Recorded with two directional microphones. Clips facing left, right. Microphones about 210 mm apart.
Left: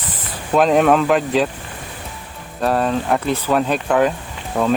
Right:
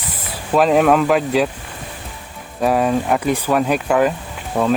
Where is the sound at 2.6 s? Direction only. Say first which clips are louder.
Right 2 dB; 10° right (ahead or behind).